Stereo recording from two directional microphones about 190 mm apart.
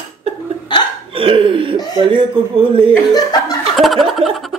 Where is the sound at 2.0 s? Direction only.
25° right (ahead or behind).